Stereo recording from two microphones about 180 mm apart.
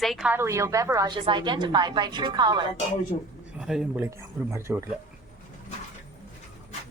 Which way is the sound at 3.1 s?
30° left (ahead or behind).